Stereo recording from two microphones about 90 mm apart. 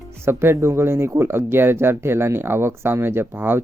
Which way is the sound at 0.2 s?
30° right (ahead or behind).